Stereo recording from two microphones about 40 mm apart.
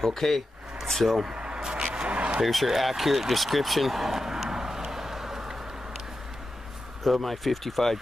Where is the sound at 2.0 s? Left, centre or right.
Right.